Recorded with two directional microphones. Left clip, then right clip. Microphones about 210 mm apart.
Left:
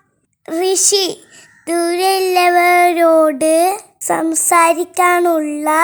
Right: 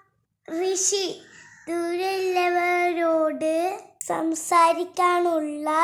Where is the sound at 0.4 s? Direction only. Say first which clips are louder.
Left 9 dB; 45° left (ahead or behind).